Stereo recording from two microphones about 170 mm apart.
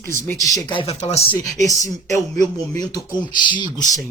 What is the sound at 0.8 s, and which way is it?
Speech, 35° left (ahead or behind).